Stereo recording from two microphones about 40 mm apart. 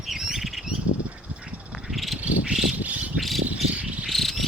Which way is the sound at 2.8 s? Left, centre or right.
Right.